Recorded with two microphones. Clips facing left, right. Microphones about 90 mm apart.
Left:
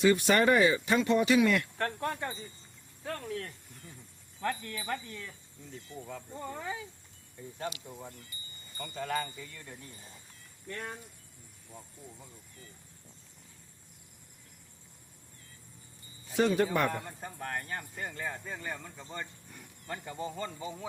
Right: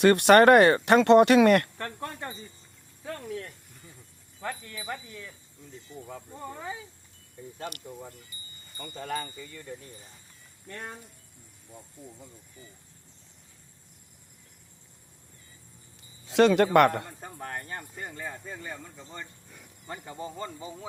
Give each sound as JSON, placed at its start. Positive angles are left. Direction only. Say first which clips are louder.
{"t": 0.0, "sound": "speech", "louder": "right 8 dB", "side_deg": -70}
{"t": 3.2, "sound": "speech", "louder": "right 1 dB", "side_deg": -20}
{"t": 8.8, "sound": "speech", "louder": "even", "side_deg": -35}
{"t": 16.2, "sound": "speech", "louder": "right 7 dB", "side_deg": -90}
{"t": 17.4, "sound": "speech", "louder": "even", "side_deg": -25}
{"t": 19.9, "sound": "speech", "louder": "even", "side_deg": -25}